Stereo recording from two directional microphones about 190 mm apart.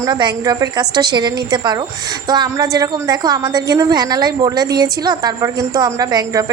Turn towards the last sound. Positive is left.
turn(degrees=-20)  # may be behind; listen again after turning